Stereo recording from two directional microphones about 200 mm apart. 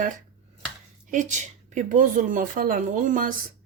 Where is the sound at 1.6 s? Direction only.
40° right (ahead or behind).